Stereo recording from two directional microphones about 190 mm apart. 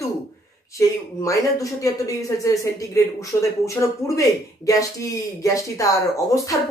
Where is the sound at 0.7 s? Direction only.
15° left (ahead or behind).